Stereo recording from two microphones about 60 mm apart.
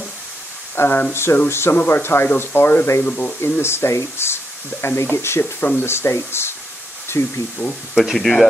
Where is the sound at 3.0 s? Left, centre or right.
Left.